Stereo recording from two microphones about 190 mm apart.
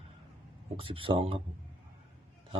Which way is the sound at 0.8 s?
25° right (ahead or behind).